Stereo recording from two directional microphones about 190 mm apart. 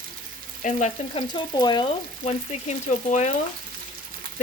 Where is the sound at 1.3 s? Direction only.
20° left (ahead or behind); by 3.3 s 35° left (ahead or behind).